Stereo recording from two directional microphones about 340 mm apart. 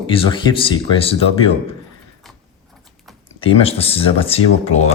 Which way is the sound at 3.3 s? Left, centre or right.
Centre.